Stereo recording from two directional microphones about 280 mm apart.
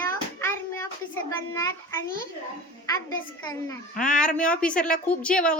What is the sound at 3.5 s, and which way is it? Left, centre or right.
A woman's voice, centre.